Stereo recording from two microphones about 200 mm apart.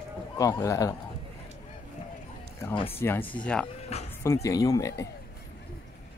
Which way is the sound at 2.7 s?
30° left (ahead or behind).